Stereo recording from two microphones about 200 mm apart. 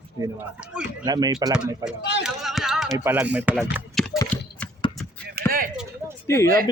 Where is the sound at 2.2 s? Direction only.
Centre (ahead or behind).